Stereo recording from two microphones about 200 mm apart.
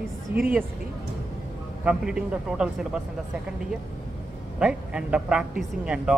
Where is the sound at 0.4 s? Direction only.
10° right (ahead or behind).